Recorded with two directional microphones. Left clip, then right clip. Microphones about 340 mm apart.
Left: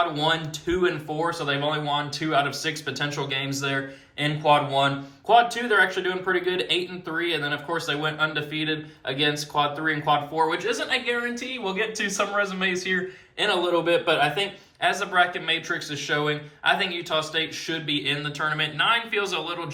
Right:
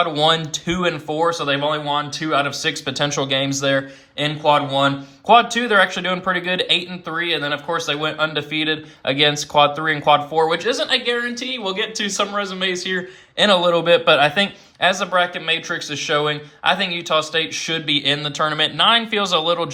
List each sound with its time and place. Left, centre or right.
0.1 s speech: centre
13.3 s speech: centre